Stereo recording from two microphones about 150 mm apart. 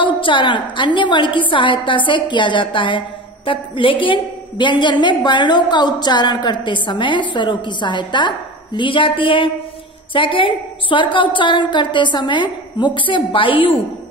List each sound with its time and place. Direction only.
0.0 s a woman's voice: 35° left (ahead or behind)